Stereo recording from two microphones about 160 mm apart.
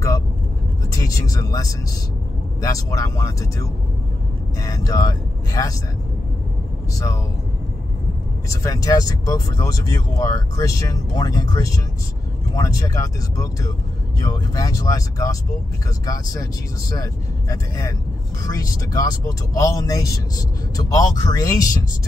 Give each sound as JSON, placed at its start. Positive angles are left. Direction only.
{"t": 0.9, "sound": "speech", "side_deg": 20}
{"t": 4.6, "sound": "speech", "side_deg": 20}
{"t": 8.5, "sound": "speech", "side_deg": 20}
{"t": 16.9, "sound": "speech", "side_deg": 20}